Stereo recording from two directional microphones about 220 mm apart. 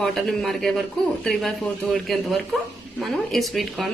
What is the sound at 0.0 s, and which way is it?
Speech, centre (ahead or behind).